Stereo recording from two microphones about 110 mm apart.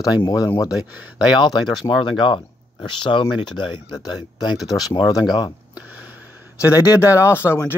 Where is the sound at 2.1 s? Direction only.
50° left (ahead or behind); by 5.2 s 35° left (ahead or behind).